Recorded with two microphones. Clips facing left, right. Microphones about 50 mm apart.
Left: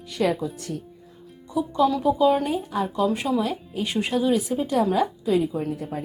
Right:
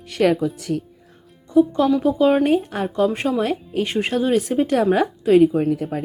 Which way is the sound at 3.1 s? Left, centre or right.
Right.